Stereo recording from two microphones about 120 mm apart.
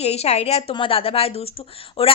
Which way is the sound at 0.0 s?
60° left (ahead or behind).